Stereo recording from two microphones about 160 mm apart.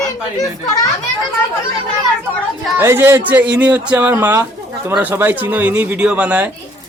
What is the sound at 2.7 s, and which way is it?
Speech, 15° right (ahead or behind).